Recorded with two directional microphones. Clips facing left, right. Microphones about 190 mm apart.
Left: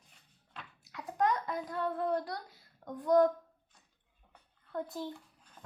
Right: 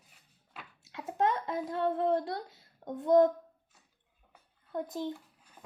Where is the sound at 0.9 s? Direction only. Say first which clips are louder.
Right 1 dB; 25° right (ahead or behind).